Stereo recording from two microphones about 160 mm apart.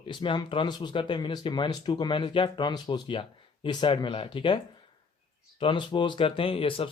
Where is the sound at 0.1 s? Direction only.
30° left (ahead or behind).